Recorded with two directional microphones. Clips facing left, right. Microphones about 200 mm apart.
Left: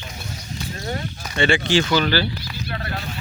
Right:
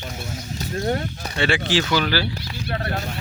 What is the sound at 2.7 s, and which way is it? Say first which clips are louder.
Speech: right 4 dB; 40° right (ahead or behind).